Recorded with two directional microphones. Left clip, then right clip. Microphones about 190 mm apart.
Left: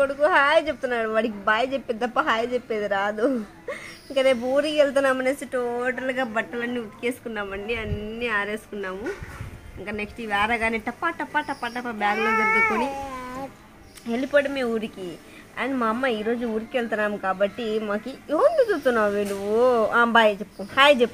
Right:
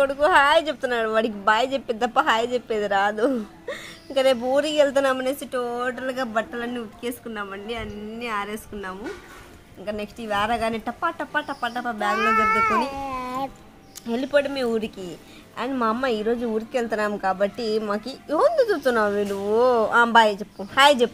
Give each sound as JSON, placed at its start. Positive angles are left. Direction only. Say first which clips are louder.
{"t": 0.0, "sound": "a woman's voice", "louder": "right 2 dB", "side_deg": -25}
{"t": 2.0, "sound": "a woman's voice", "louder": "right 3 dB", "side_deg": -20}
{"t": 5.6, "sound": "speech", "louder": "left 1 dB", "side_deg": -10}
{"t": 12.2, "sound": "speech", "louder": "right 2 dB", "side_deg": -45}
{"t": 14.0, "sound": "speech", "louder": "even", "side_deg": -10}
{"t": 18.3, "sound": "speech", "louder": "even", "side_deg": -15}